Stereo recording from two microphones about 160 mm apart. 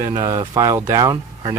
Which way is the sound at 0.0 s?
20° right (ahead or behind).